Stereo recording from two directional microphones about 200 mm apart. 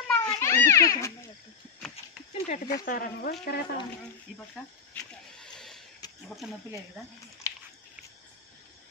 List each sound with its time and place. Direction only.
0.1 s children playing: 15° left (ahead or behind)
2.4 s speech: 40° left (ahead or behind)
4.9 s speech: 5° left (ahead or behind)
5.4 s rowboat: centre (ahead or behind)
6.2 s speech: centre (ahead or behind)
7.5 s a sound: 15° left (ahead or behind)